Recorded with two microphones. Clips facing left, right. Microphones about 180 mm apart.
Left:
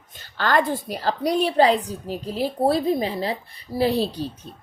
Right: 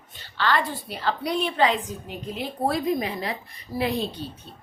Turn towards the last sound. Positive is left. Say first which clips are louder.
# left 5 dB
turn(degrees=35)  # may be behind; listen again after turning